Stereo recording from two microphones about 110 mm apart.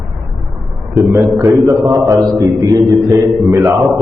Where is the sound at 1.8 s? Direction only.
30° right (ahead or behind).